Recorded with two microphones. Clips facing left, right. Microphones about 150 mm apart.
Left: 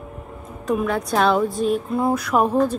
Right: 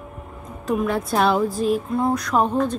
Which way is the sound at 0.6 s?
Centre (ahead or behind).